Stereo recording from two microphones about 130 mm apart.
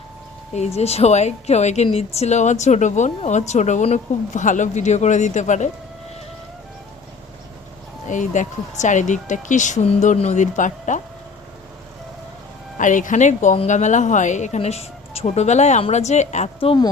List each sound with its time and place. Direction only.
0.8 s speech: 55° left (ahead or behind)
8.1 s speech: 70° left (ahead or behind)
12.8 s speech: 80° left; by 16.5 s 60° left (ahead or behind)